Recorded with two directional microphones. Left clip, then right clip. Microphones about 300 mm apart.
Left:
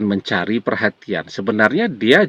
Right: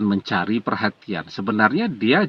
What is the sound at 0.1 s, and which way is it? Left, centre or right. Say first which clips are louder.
Speech: left 3 dB; right.